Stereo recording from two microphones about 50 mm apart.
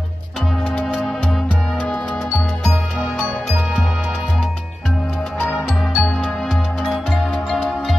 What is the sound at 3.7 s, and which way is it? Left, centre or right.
Music, centre.